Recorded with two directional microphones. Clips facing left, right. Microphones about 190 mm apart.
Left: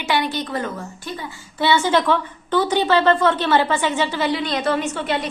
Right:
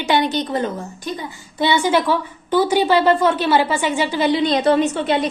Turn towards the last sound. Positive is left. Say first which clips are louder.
# right 5 dB
turn(degrees=-20)  # may be behind; listen again after turning